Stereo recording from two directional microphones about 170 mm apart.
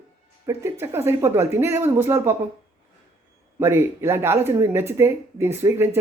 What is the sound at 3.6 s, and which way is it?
Speech, 15° right (ahead or behind).